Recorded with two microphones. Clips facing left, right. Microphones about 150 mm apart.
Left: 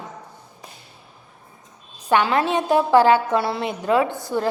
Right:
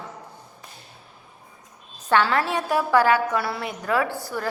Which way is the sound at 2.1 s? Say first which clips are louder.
Left 2 dB; 20° left (ahead or behind).